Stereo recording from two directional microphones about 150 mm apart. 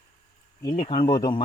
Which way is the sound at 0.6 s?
35° left (ahead or behind).